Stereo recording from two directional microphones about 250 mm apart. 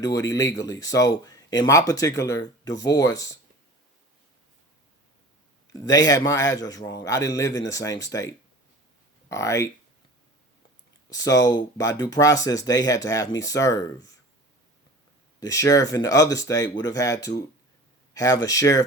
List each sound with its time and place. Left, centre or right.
0.0 s speech: centre
5.7 s speech: centre
11.1 s speech: centre
15.4 s speech: centre